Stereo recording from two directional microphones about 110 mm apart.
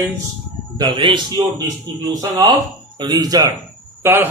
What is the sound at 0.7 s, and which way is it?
Speech, 45° right (ahead or behind).